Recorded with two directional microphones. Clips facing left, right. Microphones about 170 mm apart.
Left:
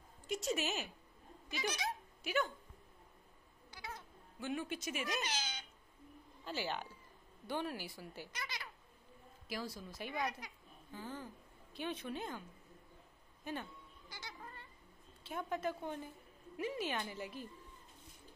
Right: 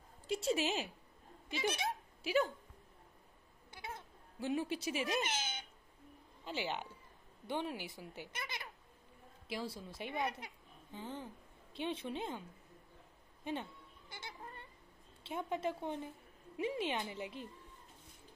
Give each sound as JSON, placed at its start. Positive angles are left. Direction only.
{"t": 0.3, "sound": "speech", "side_deg": -30}
{"t": 3.7, "sound": "cat", "side_deg": -25}
{"t": 6.4, "sound": "speech", "side_deg": -20}
{"t": 13.4, "sound": "cat", "side_deg": -25}
{"t": 15.2, "sound": "speech", "side_deg": -25}